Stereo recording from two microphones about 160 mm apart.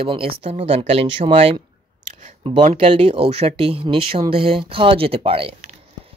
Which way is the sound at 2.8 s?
40° right (ahead or behind).